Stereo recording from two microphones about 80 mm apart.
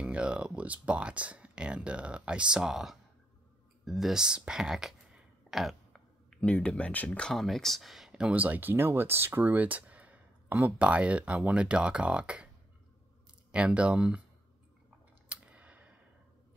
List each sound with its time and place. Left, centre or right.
0.0 s speech: centre
3.8 s a sound: centre
6.4 s speech: centre
7.3 s speech: centre
13.5 s speech: centre
15.2 s a sound: centre